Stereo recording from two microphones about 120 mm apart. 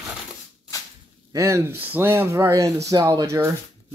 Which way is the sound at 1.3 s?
25° right (ahead or behind).